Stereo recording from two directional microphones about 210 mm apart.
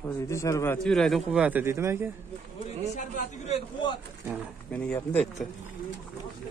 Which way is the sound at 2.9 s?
35° left (ahead or behind).